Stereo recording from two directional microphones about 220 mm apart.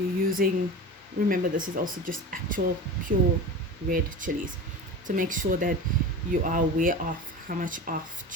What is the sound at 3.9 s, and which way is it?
Speech, 40° right (ahead or behind).